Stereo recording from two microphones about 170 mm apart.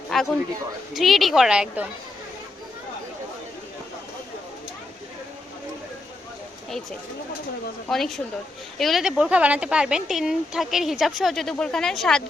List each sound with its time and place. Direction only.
0.1 s a sound: centre (ahead or behind)
0.9 s speech: centre (ahead or behind)
7.9 s speech: centre (ahead or behind)